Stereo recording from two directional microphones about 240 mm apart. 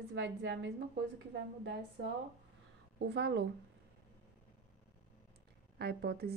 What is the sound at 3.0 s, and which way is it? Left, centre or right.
Speech, right.